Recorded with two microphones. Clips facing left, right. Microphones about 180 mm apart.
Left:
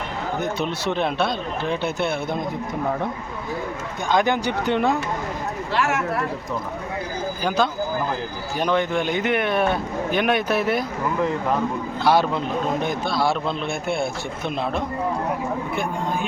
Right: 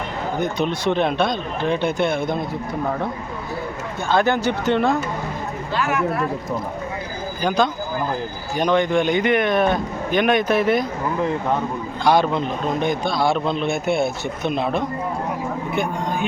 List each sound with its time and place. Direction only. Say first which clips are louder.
0.6 s speech: right 6 dB; 5° left (ahead or behind)
4.1 s a man's voice: right 2 dB; 15° left (ahead or behind)
5.7 s speech: even; 85° left
7.4 s a man's voice: right 2 dB; 5° left (ahead or behind)